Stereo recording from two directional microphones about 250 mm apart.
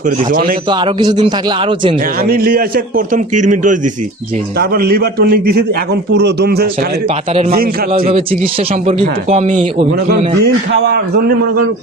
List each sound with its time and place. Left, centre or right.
0.2 s a man's voice: right
0.7 s speech: centre
2.2 s a man's voice: right
8.0 s speech: right
10.4 s a man's voice: right